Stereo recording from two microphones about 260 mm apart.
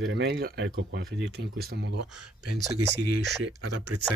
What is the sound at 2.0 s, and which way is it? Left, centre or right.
Speech, right.